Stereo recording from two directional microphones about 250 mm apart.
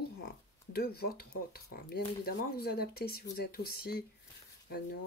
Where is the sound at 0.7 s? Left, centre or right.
Left.